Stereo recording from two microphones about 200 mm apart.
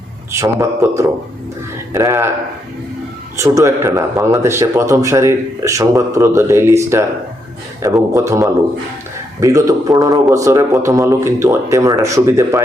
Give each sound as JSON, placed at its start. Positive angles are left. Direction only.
{"t": 0.3, "sound": "speech", "side_deg": -15}
{"t": 3.3, "sound": "speech", "side_deg": -15}